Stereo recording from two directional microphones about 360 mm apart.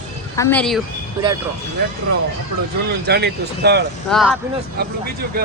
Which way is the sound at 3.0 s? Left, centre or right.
Right.